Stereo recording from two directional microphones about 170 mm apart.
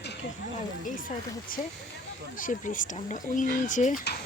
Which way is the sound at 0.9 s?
50° left (ahead or behind).